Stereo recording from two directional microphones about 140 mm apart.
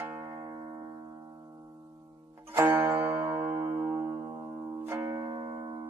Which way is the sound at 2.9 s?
15° right (ahead or behind).